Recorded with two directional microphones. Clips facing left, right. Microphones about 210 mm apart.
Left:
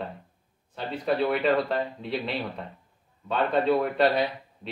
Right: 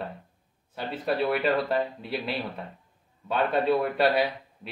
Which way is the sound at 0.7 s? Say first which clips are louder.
Left 1 dB; 5° right (ahead or behind).